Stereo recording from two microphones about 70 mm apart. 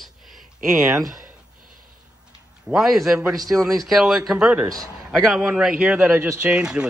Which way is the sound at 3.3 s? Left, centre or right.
Right.